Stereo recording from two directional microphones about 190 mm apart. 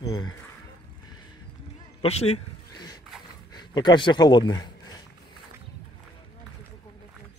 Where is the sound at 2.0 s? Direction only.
35° left (ahead or behind).